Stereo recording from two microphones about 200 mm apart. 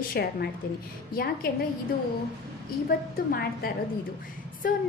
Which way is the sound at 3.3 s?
50° left (ahead or behind).